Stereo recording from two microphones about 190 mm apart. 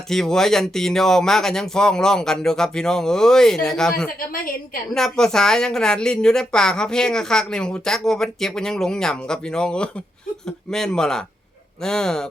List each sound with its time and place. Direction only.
0.1 s a woman's voice: centre (ahead or behind)
4.3 s a woman's voice: 50° left (ahead or behind)
4.9 s a woman's voice: 5° left (ahead or behind)